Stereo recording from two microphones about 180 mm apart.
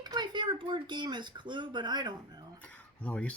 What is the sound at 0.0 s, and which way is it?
Speech, 25° right (ahead or behind).